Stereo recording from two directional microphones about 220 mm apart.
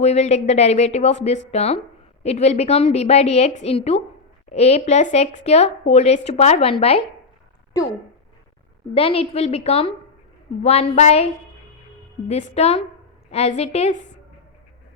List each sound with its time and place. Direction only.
0.0 s speech: 30° left (ahead or behind)
9.0 s speech: 25° left (ahead or behind)
12.3 s speech: 30° left (ahead or behind)